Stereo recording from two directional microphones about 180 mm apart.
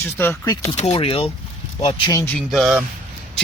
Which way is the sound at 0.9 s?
30° left (ahead or behind).